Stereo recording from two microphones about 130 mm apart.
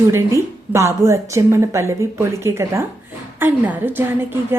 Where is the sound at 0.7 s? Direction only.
20° right (ahead or behind).